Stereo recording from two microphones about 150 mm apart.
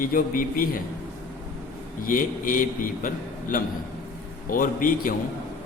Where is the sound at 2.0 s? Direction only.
65° left (ahead or behind).